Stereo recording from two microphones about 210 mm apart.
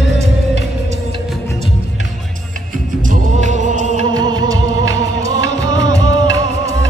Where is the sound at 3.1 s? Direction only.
35° right (ahead or behind).